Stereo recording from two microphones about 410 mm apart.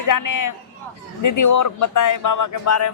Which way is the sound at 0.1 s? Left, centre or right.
Left.